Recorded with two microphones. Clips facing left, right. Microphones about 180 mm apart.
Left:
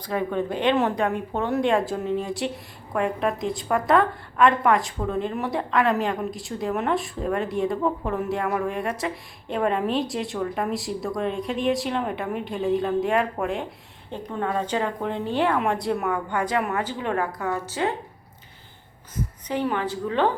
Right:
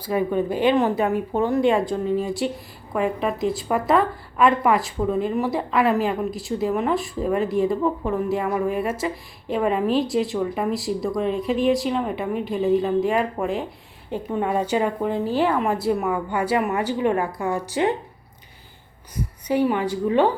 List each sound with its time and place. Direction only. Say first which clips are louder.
0.0 s a woman's voice: right 4 dB; 5° right (ahead or behind)
19.1 s a woman's voice: right 5 dB; 10° right (ahead or behind)